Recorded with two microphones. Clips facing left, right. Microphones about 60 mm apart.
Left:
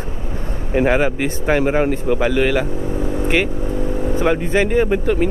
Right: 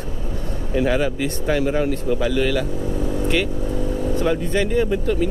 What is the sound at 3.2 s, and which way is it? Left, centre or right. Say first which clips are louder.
Vehicle: left 4 dB; left.